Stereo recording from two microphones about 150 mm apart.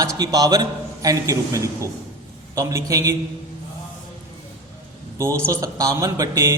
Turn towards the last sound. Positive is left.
turn(degrees=-25)  # may be behind; listen again after turning